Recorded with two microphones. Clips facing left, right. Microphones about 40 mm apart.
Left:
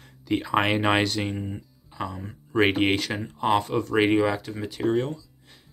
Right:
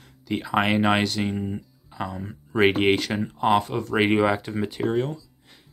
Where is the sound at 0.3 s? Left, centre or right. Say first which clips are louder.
Even; centre.